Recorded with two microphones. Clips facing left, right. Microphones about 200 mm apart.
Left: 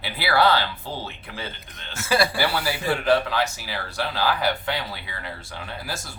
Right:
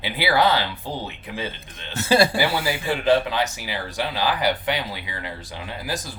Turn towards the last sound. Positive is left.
turn(degrees=-15)  # may be behind; listen again after turning